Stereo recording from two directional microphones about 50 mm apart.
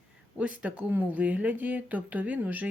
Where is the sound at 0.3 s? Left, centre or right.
Right.